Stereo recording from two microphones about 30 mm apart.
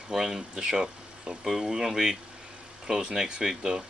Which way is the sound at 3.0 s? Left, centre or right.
Right.